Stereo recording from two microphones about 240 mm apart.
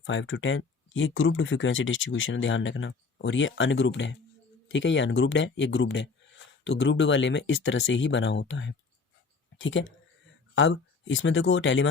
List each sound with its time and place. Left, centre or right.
0.0 s speech: left